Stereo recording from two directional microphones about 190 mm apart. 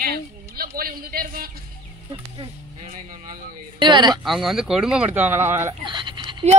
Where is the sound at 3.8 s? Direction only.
25° right (ahead or behind).